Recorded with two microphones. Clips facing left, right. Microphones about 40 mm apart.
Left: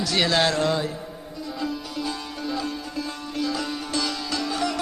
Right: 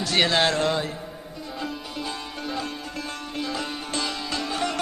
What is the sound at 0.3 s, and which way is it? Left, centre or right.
Speech, right.